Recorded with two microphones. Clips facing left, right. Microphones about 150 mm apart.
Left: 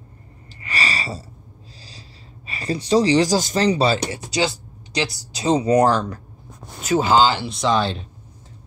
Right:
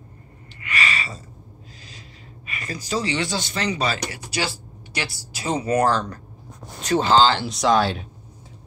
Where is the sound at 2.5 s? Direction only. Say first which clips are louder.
Left 9 dB; 30° left (ahead or behind); by 8.1 s 5° right (ahead or behind).